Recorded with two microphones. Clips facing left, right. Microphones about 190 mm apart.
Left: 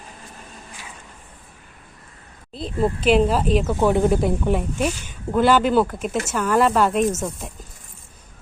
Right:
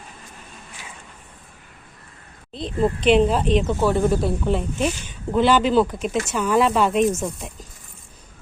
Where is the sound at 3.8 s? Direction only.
20° left (ahead or behind); by 7.5 s centre (ahead or behind).